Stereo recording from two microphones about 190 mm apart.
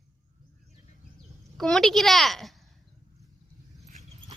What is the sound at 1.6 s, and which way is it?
Speech, centre (ahead or behind).